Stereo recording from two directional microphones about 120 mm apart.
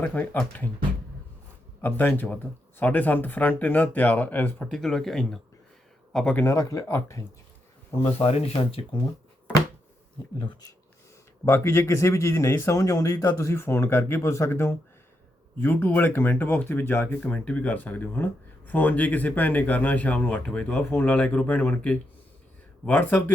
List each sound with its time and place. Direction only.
0.0 s speech: 10° left (ahead or behind)
1.8 s speech: 15° left (ahead or behind)
6.3 s speech: 25° left (ahead or behind)
7.9 s speech: 55° left (ahead or behind)
11.4 s speech: 20° left (ahead or behind)